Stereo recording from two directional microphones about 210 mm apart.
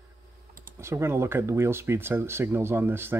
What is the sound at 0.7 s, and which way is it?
Speech, 10° right (ahead or behind).